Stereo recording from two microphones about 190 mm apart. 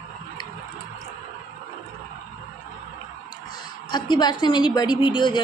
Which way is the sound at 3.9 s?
20° left (ahead or behind).